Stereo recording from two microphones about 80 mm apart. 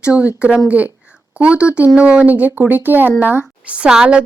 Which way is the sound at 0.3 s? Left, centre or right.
Centre.